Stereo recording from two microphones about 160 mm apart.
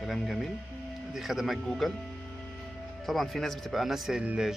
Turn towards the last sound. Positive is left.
turn(degrees=-5)  # may be behind; listen again after turning